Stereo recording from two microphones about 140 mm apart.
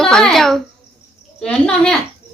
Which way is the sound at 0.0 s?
5° left (ahead or behind).